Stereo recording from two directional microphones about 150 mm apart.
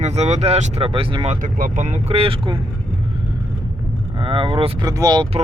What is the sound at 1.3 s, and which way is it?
Speech, 60° right (ahead or behind).